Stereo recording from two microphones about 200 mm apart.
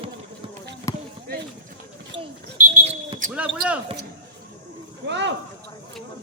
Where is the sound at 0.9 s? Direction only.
15° left (ahead or behind).